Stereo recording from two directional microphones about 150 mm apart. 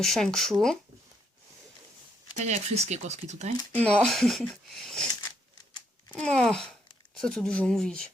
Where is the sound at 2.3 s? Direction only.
50° right (ahead or behind).